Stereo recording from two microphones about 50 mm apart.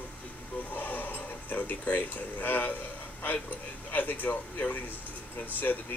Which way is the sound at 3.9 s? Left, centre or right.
Left.